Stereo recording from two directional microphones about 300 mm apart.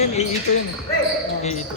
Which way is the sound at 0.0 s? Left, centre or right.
Left.